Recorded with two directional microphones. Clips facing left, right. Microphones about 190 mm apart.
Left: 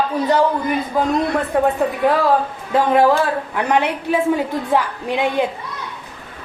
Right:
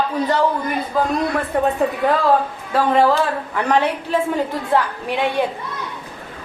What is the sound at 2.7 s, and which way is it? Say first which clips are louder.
A woman's voice: left 2 dB; 15° left (ahead or behind).